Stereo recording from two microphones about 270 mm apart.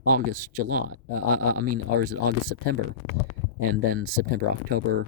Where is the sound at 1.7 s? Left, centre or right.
Right.